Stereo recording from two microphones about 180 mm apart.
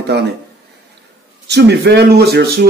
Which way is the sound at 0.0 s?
70° right (ahead or behind).